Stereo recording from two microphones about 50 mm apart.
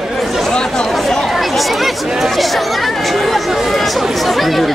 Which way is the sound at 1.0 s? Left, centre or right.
Centre.